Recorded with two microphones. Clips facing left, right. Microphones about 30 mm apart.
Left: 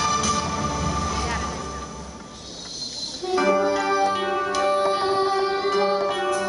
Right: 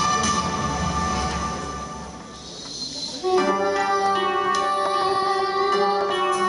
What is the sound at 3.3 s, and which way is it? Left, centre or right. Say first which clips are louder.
Music: even; centre.